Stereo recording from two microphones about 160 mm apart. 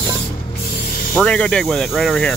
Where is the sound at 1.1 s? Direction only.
5° left (ahead or behind).